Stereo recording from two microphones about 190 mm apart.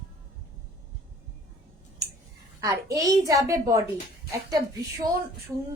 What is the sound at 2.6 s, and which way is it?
A woman's voice, 15° right (ahead or behind).